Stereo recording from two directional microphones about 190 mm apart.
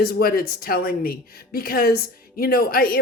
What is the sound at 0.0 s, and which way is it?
Speech, 50° left (ahead or behind).